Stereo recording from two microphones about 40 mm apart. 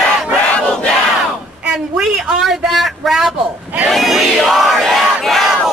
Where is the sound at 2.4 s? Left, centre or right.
Centre.